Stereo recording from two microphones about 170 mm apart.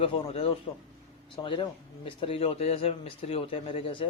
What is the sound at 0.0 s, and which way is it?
Speech, 35° left (ahead or behind).